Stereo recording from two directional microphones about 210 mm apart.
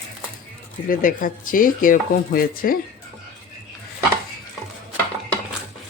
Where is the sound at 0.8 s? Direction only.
40° left (ahead or behind).